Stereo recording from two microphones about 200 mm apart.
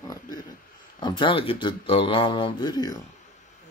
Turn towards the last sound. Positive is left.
turn(degrees=20)  # may be behind; listen again after turning